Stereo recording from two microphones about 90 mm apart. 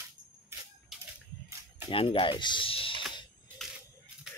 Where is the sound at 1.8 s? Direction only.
85° left.